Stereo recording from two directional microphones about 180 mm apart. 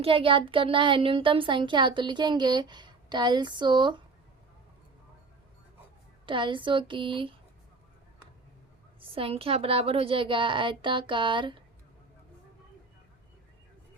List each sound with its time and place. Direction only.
0.0 s speech: 30° right (ahead or behind)
6.2 s speech: 25° right (ahead or behind)
9.0 s speech: 30° right (ahead or behind)